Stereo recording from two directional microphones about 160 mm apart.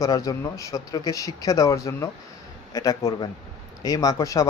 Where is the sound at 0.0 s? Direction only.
20° left (ahead or behind).